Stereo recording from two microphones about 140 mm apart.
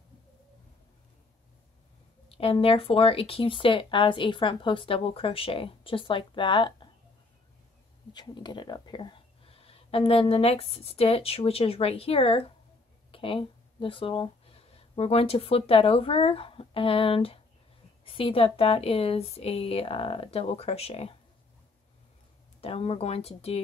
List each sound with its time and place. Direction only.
2.2 s speech: 40° left (ahead or behind)
8.1 s speech: 30° left (ahead or behind)
22.6 s speech: 45° left (ahead or behind)